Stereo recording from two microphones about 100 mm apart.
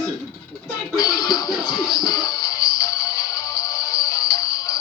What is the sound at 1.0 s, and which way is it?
Speech, 40° left (ahead or behind).